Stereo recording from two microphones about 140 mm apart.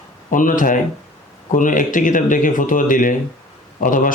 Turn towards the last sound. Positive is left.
turn(degrees=70)  # may be behind; listen again after turning